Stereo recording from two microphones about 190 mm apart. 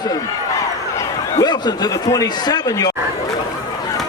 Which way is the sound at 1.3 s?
20° left (ahead or behind).